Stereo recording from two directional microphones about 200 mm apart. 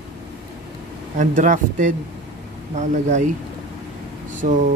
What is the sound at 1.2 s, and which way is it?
Speech, 40° right (ahead or behind).